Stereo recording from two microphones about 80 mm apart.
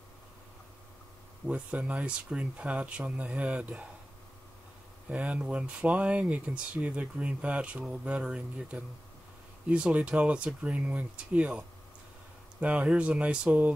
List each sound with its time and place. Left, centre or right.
1.5 s speech: centre
5.1 s speech: centre